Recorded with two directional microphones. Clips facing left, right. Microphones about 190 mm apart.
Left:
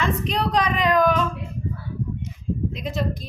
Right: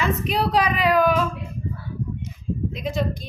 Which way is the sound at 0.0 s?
5° right (ahead or behind).